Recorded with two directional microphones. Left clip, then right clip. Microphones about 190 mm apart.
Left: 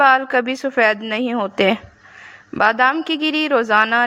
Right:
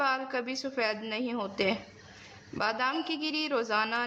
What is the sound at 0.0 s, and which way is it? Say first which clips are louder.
Speech: left 16 dB; 40° left (ahead or behind).